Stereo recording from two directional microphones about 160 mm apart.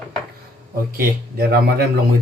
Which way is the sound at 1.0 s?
75° right (ahead or behind).